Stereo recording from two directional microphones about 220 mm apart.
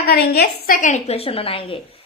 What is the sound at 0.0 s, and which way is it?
A woman's voice, 45° left (ahead or behind).